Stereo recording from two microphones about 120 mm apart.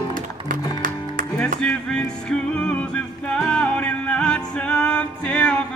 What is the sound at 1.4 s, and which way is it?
Music, 5° left (ahead or behind).